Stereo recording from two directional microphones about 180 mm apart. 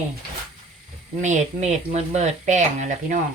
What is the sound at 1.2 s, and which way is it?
Speech, 40° right (ahead or behind).